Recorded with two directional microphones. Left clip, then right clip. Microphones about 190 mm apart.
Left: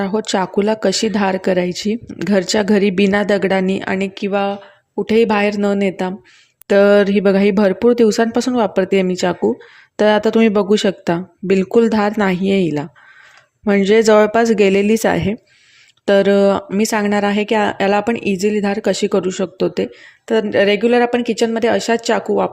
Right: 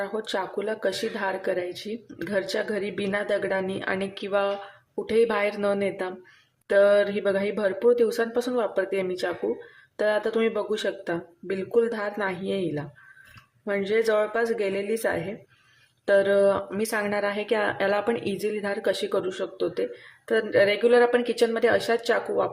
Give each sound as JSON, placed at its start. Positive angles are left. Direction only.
{"t": 0.0, "sound": "speech", "side_deg": 35}